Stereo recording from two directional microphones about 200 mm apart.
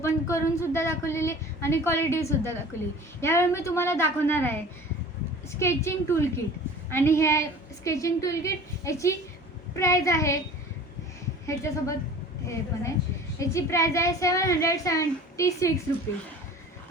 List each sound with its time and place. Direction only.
0.0 s speech: 15° left (ahead or behind)
11.4 s speech: 15° left (ahead or behind)
13.4 s speech: 15° left (ahead or behind)